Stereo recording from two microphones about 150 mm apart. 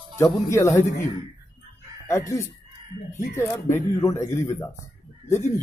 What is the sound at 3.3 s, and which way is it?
Speech, 20° left (ahead or behind).